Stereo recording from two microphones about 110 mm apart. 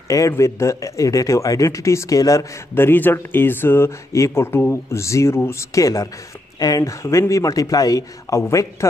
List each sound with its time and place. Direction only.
0.3 s speech: 25° left (ahead or behind)
2.7 s speech: 20° left (ahead or behind)